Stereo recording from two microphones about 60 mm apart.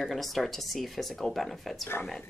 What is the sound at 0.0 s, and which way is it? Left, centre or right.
Speech, centre.